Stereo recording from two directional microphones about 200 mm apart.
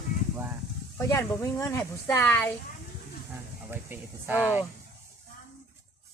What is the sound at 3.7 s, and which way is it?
Speech, 10° right (ahead or behind).